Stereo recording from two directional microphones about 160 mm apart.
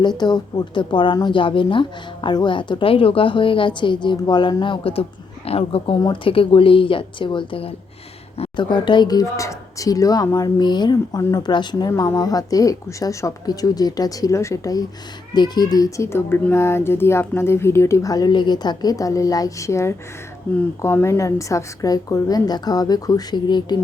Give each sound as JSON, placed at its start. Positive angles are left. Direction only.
{"t": 0.2, "sound": "a woman's voice", "side_deg": 25}